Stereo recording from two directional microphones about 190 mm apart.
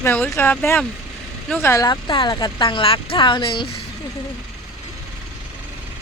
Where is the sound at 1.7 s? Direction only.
20° left (ahead or behind).